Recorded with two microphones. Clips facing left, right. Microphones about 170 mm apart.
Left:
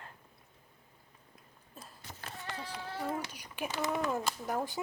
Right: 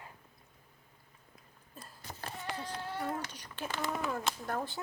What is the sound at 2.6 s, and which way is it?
Speech, 5° left (ahead or behind).